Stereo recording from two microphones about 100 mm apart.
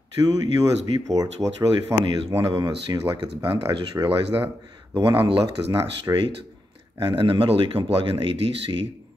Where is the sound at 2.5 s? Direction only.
45° right (ahead or behind).